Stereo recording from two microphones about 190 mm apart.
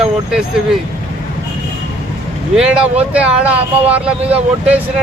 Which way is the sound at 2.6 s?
5° right (ahead or behind).